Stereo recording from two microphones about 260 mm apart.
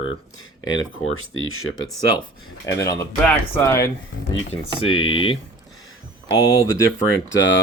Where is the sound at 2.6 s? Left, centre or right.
Centre.